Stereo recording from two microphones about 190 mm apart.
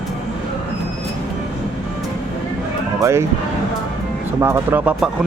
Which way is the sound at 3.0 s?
15° right (ahead or behind).